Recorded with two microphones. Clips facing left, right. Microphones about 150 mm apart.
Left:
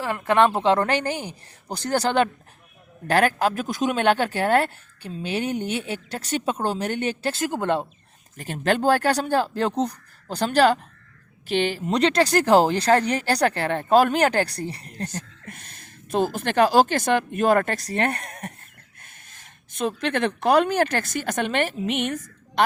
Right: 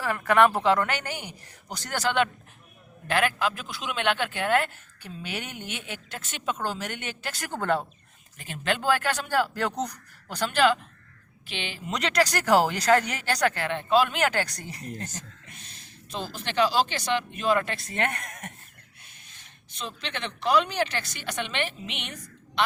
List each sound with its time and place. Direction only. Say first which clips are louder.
0.0 s speech: left 2 dB; 20° left (ahead or behind)
7.4 s speech: left 2 dB; 20° left (ahead or behind)
8.4 s a woman's voice: left 7 dB; 40° left (ahead or behind)
11.9 s speech: left 6 dB; 30° left (ahead or behind)
18.9 s speech: left 6 dB; 50° left (ahead or behind)